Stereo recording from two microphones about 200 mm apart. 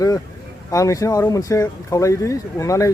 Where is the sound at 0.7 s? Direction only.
15° left (ahead or behind).